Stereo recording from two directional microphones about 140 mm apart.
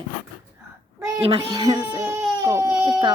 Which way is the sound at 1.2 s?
40° right (ahead or behind).